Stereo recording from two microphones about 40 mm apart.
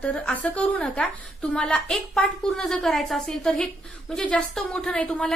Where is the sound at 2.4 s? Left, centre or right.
Centre.